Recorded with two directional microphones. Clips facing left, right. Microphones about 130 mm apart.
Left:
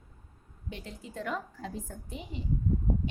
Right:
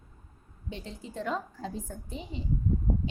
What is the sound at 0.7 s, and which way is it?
Speech, 30° right (ahead or behind).